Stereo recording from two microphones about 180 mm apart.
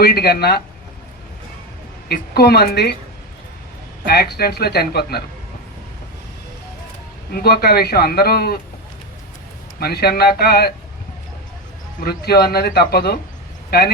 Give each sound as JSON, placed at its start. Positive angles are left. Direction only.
{"t": 0.0, "sound": "a man's voice", "side_deg": 60}
{"t": 2.0, "sound": "a man's voice", "side_deg": 60}
{"t": 4.1, "sound": "a man's voice", "side_deg": 60}
{"t": 7.3, "sound": "a man's voice", "side_deg": 60}
{"t": 9.8, "sound": "a man's voice", "side_deg": 60}
{"t": 11.9, "sound": "a man's voice", "side_deg": 60}